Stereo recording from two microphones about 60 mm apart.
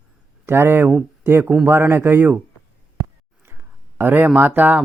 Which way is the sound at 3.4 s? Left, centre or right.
Right.